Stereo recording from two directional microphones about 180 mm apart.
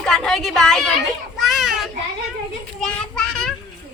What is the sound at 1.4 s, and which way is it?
Children playing, centre (ahead or behind).